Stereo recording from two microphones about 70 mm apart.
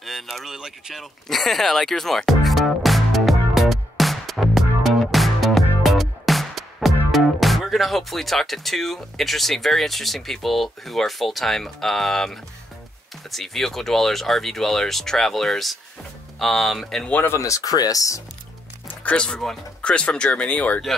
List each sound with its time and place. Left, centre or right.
0.0 s speech: centre
1.3 s music: centre
13.3 s speech: centre
17.1 s speech: left
17.4 s speech: left
18.9 s music: left
19.2 s speech: centre